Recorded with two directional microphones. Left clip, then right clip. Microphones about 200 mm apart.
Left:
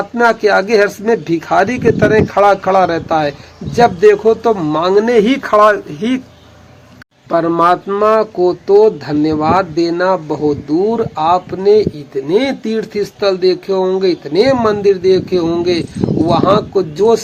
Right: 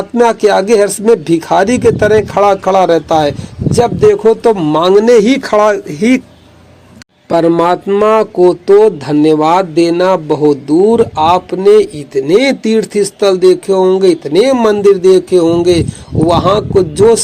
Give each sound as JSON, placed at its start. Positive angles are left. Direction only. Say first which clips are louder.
{"t": 0.2, "sound": "speech", "louder": "right 2 dB", "side_deg": -35}
{"t": 7.3, "sound": "speech", "louder": "right 2 dB", "side_deg": -30}